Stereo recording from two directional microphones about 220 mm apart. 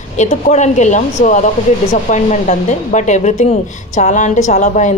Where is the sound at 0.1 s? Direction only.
30° left (ahead or behind).